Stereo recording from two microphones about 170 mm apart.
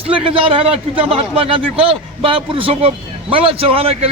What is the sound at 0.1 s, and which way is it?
A man's voice, 35° right (ahead or behind).